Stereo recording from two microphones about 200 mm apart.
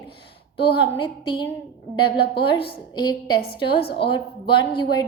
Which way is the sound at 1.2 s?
25° left (ahead or behind).